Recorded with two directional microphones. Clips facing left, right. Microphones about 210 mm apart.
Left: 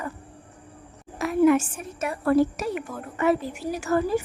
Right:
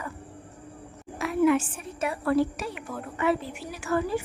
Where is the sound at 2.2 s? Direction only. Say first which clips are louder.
Left 5 dB; 45° left (ahead or behind).